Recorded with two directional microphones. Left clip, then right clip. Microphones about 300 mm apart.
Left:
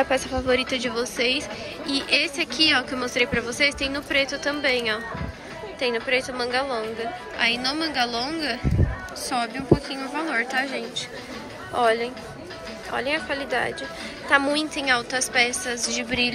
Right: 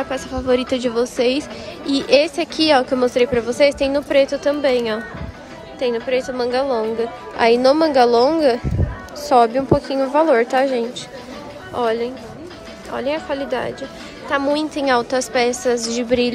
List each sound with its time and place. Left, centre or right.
0.0 s a woman's voice: centre